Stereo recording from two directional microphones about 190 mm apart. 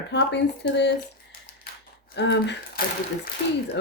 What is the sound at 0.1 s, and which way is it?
Speech, 65° left (ahead or behind).